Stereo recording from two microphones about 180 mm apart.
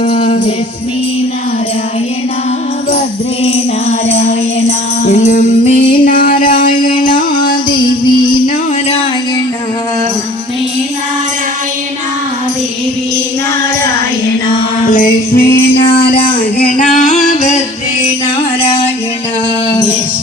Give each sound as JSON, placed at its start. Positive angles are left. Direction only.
{"t": 0.0, "sound": "music", "side_deg": 45}
{"t": 3.4, "sound": "music", "side_deg": 35}
{"t": 7.3, "sound": "music", "side_deg": 25}
{"t": 14.8, "sound": "music", "side_deg": 50}
{"t": 17.2, "sound": "singing", "side_deg": 40}
{"t": 18.6, "sound": "music", "side_deg": 30}